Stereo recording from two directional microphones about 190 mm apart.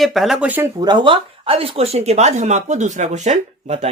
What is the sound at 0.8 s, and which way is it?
Speech, 25° right (ahead or behind).